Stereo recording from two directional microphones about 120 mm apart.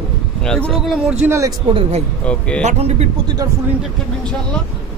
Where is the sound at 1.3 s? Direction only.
25° right (ahead or behind).